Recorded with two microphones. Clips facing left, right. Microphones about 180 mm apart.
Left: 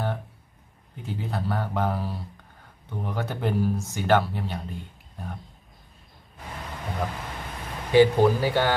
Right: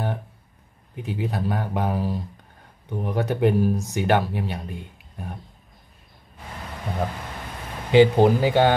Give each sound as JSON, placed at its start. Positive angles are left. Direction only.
{"t": 0.9, "sound": "speech", "side_deg": -15}
{"t": 7.9, "sound": "speech", "side_deg": -20}